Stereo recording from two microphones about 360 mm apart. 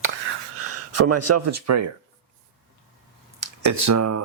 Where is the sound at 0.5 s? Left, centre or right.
Right.